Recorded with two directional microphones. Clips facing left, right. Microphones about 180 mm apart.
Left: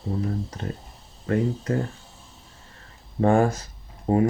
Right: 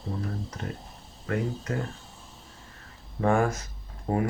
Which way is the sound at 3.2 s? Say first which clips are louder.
Left 4 dB; 30° left (ahead or behind).